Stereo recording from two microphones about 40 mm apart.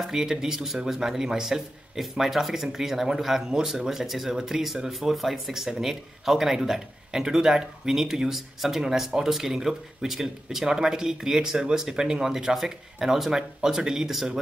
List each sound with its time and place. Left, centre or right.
0.0 s speech: centre